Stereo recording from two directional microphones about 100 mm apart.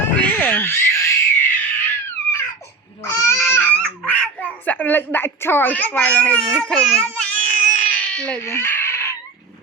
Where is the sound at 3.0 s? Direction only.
30° left (ahead or behind).